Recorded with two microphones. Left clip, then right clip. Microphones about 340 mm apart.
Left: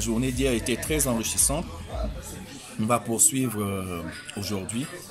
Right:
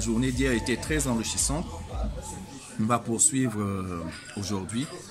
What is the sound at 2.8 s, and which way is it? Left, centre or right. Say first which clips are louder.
Speech: left 2 dB; centre.